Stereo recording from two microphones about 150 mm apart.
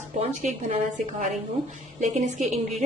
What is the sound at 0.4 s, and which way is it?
Speech, 55° right (ahead or behind).